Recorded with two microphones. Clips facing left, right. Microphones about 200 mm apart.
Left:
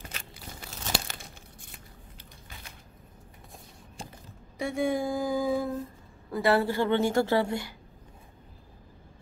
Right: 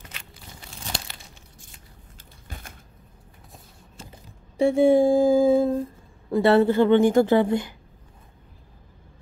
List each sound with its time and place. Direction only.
4.6 s a woman's voice: 30° right (ahead or behind)